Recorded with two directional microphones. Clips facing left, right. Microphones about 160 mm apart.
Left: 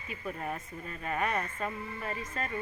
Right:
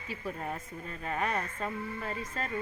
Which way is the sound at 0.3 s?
Centre (ahead or behind).